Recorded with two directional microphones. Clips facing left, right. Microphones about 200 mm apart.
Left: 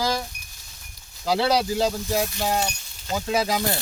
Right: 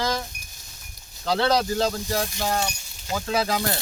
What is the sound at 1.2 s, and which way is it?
Speech, 10° left (ahead or behind).